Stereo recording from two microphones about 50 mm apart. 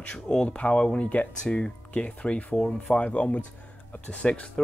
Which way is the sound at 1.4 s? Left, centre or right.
Centre.